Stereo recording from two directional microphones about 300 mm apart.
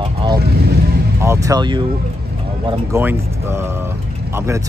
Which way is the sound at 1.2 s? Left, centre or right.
Centre.